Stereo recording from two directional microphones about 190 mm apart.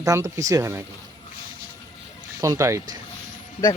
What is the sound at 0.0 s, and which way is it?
Speech, 15° right (ahead or behind).